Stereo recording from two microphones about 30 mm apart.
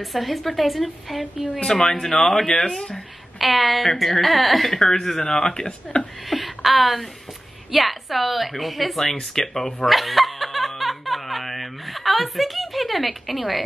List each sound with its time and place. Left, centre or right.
0.0 s a woman's voice: centre
1.6 s speech: centre
2.9 s a woman's voice: centre
5.2 s speech: left
6.2 s a woman's voice: centre
9.0 s speech: centre
9.8 s snicker: centre